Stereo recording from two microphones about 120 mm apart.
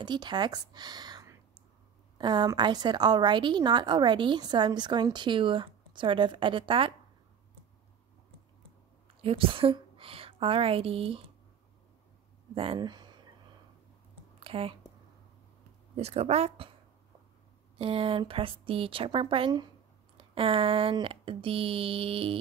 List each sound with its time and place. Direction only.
0.0 s a woman's voice: 40° right (ahead or behind)
9.2 s a woman's voice: 50° right (ahead or behind)
12.7 s speech: 35° right (ahead or behind)
14.4 s speech: 50° right (ahead or behind)
16.0 s speech: 60° right (ahead or behind)
17.7 s speech: 50° right (ahead or behind)